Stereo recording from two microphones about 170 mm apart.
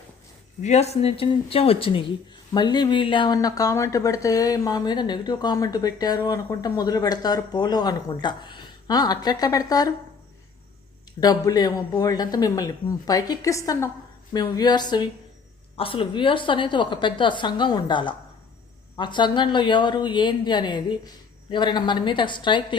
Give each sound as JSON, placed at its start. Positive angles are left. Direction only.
{"t": 0.6, "sound": "speech", "side_deg": 40}
{"t": 11.2, "sound": "speech", "side_deg": 25}